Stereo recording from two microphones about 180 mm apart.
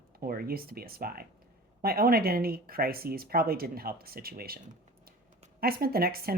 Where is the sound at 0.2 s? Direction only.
55° right (ahead or behind).